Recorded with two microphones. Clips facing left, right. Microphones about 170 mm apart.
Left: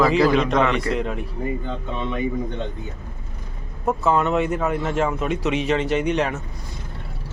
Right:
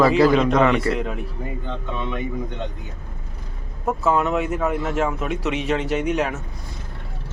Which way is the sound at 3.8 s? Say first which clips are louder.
Left 1 dB; 5° right (ahead or behind).